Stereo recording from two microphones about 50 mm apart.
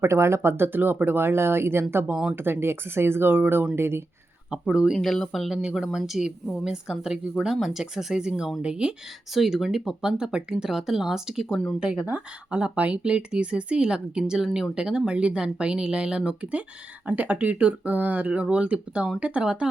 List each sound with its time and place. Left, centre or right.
0.0 s speech: right
3.8 s speech: right
4.5 s speech: centre
4.9 s speech: centre
5.3 s speech: centre
9.3 s speech: centre
12.5 s speech: right
14.4 s speech: centre
14.8 s speech: centre